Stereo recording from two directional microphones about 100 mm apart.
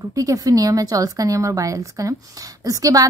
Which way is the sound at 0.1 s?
35° right (ahead or behind).